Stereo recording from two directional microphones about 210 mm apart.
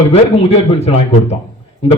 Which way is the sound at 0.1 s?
30° left (ahead or behind).